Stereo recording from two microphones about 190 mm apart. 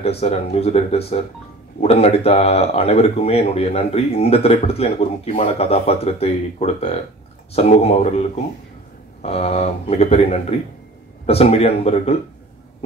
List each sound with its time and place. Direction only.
0.0 s speech: 35° left (ahead or behind)